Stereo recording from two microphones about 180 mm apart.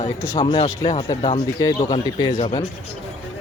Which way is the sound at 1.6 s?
20° left (ahead or behind).